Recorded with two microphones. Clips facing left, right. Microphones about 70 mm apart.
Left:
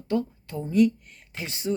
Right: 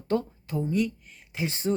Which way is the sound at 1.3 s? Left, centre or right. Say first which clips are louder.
Right 2 dB; right.